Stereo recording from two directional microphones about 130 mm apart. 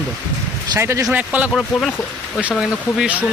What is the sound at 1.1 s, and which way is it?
Speech, 10° right (ahead or behind).